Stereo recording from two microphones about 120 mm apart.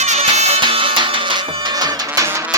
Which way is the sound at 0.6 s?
45° right (ahead or behind).